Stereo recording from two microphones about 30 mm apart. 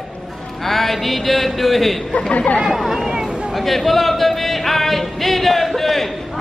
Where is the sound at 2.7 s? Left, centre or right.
Centre.